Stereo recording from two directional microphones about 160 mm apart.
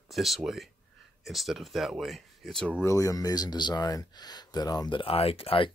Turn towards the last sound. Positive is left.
turn(degrees=35)  # may be behind; listen again after turning